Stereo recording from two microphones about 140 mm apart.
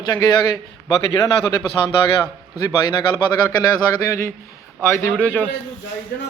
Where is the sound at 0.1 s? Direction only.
30° left (ahead or behind).